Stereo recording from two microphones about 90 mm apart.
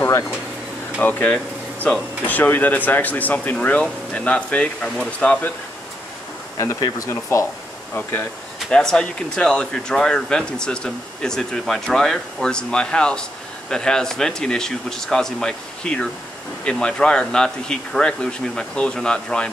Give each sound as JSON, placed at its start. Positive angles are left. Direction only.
{"t": 0.9, "sound": "speech", "side_deg": 20}
{"t": 1.3, "sound": "speech", "side_deg": 10}
{"t": 6.6, "sound": "speech", "side_deg": 35}
{"t": 8.6, "sound": "speech", "side_deg": 10}